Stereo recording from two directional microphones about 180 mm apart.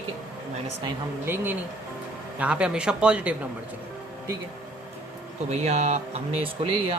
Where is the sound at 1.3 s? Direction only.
15° right (ahead or behind).